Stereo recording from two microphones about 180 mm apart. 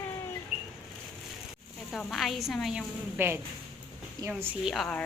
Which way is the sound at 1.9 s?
Centre (ahead or behind).